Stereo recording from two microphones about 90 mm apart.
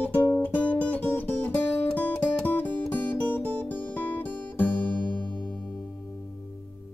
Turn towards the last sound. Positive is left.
turn(degrees=15)  # may be behind; listen again after turning